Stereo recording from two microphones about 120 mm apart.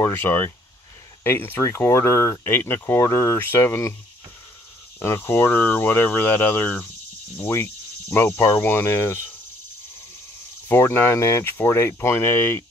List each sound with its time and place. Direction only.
0.0 s speech: 15° left (ahead or behind)
4.9 s speech: 20° left (ahead or behind)
10.7 s speech: 20° left (ahead or behind)